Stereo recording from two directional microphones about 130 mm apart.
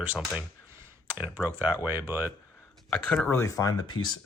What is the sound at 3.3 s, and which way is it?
Speech, 25° left (ahead or behind).